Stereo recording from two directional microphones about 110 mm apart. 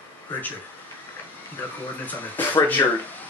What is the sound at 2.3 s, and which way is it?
Speech, 20° left (ahead or behind).